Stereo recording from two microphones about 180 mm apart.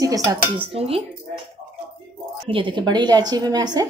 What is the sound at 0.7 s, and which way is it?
Dishes, 30° right (ahead or behind).